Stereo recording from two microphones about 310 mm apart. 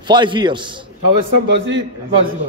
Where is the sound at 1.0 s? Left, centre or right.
Right.